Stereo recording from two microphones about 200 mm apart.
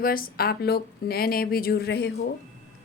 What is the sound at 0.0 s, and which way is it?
A woman's voice, 45° left (ahead or behind).